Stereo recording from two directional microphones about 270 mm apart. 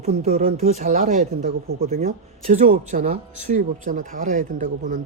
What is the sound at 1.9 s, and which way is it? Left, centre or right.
Speech, right.